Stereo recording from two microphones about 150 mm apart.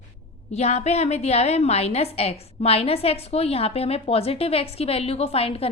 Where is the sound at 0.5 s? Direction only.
45° left (ahead or behind).